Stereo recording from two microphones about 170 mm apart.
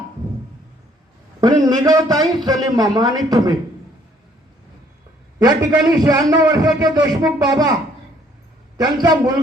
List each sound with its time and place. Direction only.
1.6 s a man's voice: 20° right (ahead or behind)
5.4 s a man's voice: 25° right (ahead or behind)
8.8 s a man's voice: 25° right (ahead or behind)